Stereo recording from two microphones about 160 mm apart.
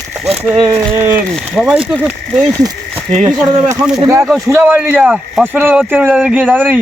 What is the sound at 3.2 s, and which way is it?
Speech, 20° right (ahead or behind).